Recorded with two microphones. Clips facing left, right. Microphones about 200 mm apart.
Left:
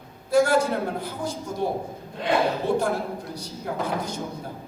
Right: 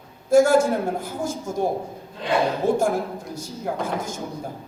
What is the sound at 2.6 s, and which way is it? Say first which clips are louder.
Speech: right 5 dB; 45° right (ahead or behind).